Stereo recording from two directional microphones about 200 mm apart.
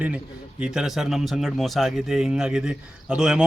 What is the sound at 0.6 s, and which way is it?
A man's voice, 5° right (ahead or behind).